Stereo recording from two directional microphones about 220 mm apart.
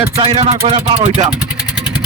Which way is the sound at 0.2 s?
25° right (ahead or behind).